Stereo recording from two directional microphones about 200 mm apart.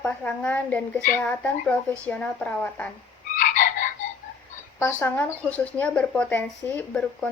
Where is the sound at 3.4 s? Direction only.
40° left (ahead or behind).